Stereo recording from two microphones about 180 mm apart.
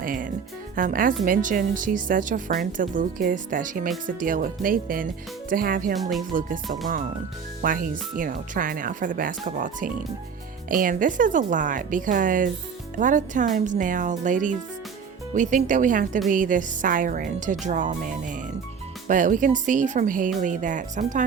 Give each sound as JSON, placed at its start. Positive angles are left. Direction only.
{"t": 0.0, "sound": "a woman's voice", "side_deg": -50}
{"t": 5.9, "sound": "speech", "side_deg": 0}
{"t": 7.6, "sound": "a woman's voice", "side_deg": -50}